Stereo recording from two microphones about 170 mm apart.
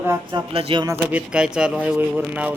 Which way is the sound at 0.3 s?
30° right (ahead or behind).